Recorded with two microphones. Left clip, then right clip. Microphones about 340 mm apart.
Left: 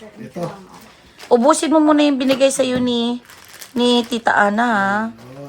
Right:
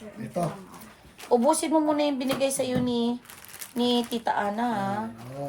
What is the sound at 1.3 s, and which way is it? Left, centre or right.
Speech, left.